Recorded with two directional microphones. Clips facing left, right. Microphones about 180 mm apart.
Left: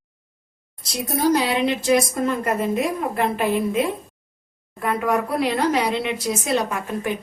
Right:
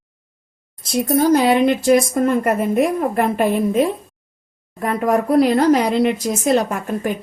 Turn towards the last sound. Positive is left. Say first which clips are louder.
# right 4 dB
turn(degrees=-45)  # may be behind; listen again after turning